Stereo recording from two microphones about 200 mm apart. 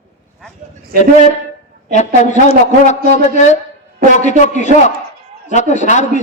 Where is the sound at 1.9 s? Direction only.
35° left (ahead or behind).